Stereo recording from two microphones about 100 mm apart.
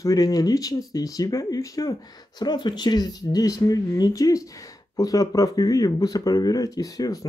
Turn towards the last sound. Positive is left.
turn(degrees=35)  # may be behind; listen again after turning